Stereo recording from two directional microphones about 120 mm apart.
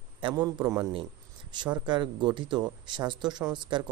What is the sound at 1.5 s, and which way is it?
Speech, 40° right (ahead or behind).